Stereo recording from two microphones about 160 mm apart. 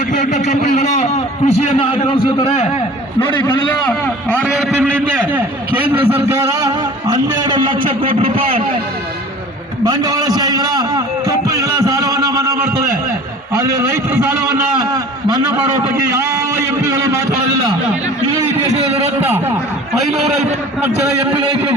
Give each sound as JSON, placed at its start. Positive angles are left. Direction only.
{"t": 0.1, "sound": "a man's voice", "side_deg": 50}
{"t": 3.8, "sound": "a man's voice", "side_deg": 10}
{"t": 4.5, "sound": "a man's voice", "side_deg": -5}
{"t": 9.8, "sound": "a man's voice", "side_deg": -25}
{"t": 16.0, "sound": "a man's voice", "side_deg": -15}
{"t": 19.2, "sound": "a man's voice", "side_deg": -10}